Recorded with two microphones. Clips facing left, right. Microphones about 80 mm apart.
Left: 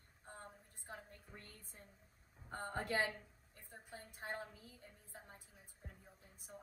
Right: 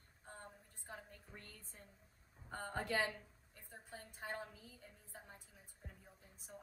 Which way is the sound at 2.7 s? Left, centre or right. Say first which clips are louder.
Even; centre.